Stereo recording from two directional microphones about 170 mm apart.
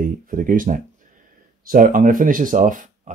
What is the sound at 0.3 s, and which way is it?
Speech, 55° right (ahead or behind).